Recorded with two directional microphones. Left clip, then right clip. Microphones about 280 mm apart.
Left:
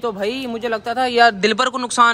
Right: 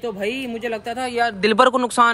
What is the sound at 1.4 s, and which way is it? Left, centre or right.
Speech, centre.